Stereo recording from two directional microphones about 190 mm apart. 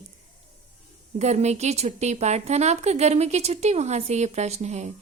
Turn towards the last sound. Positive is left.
turn(degrees=-35)  # may be behind; listen again after turning